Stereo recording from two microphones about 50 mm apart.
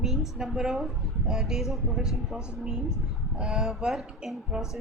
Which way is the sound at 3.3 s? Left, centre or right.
Centre.